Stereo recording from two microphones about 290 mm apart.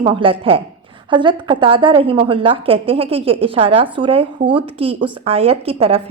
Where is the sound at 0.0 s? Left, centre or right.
Centre.